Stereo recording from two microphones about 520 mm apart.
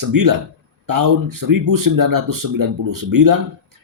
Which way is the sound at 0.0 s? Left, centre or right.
Right.